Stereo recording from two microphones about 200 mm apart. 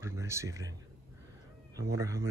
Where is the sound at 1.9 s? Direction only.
15° right (ahead or behind).